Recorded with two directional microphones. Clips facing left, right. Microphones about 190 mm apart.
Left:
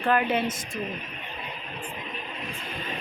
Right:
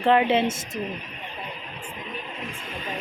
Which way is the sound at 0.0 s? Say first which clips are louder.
Right 4 dB; 25° right (ahead or behind).